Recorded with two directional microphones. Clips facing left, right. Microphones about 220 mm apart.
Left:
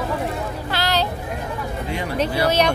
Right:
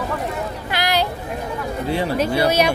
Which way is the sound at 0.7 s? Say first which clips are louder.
Right 1 dB; 15° right (ahead or behind).